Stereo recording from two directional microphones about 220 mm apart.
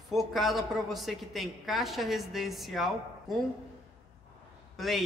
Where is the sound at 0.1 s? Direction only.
Centre (ahead or behind).